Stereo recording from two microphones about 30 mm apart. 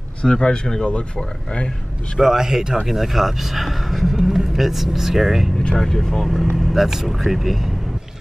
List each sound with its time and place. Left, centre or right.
0.2 s speech: left
0.8 s speech: left
2.1 s speech: centre
2.9 s speech: centre
5.8 s speech: centre
6.5 s speech: centre